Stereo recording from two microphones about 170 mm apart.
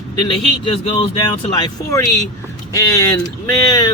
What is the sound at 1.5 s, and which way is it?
Speech, 25° left (ahead or behind).